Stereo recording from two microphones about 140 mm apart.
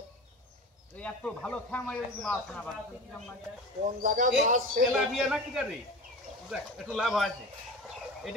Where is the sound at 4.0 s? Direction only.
70° right (ahead or behind).